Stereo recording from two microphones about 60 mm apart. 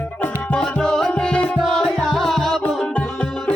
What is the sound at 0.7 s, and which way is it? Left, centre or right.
Music, centre.